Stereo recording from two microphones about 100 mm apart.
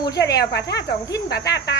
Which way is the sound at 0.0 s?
40° left (ahead or behind).